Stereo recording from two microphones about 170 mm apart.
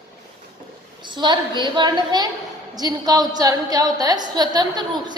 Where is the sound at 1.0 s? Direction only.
25° right (ahead or behind).